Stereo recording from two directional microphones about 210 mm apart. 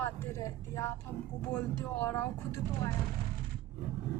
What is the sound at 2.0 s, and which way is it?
Speech, 10° left (ahead or behind).